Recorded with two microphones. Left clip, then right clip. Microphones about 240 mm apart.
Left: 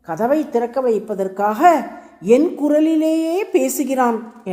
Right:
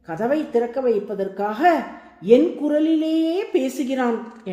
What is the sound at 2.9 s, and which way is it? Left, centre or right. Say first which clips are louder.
Speech: left 3 dB; left.